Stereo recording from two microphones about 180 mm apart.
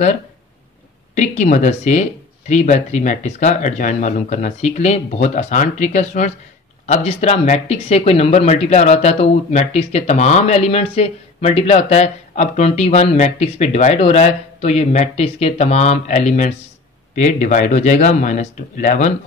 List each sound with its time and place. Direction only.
1.1 s speech: 40° left (ahead or behind)